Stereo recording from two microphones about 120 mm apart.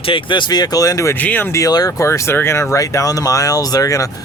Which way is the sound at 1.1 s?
15° left (ahead or behind).